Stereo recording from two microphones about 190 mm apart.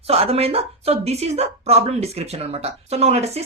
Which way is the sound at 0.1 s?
35° right (ahead or behind).